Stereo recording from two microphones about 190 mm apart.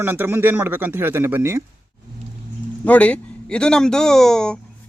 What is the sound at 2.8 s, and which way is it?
Speech, 5° left (ahead or behind).